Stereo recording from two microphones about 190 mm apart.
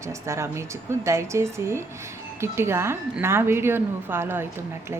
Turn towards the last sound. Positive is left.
turn(degrees=-10)  # may be behind; listen again after turning